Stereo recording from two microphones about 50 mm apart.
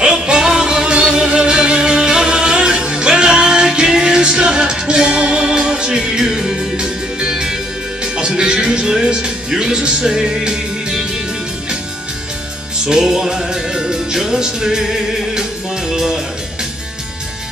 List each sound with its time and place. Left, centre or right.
0.0 s music: centre
8.0 s speech: centre
12.8 s music: centre